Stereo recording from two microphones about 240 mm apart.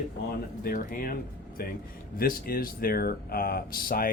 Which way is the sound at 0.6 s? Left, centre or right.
Left.